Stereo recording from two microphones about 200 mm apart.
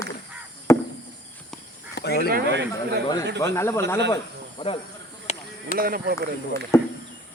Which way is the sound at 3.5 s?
10° left (ahead or behind).